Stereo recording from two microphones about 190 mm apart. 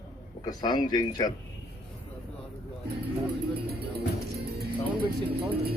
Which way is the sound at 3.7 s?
55° right (ahead or behind).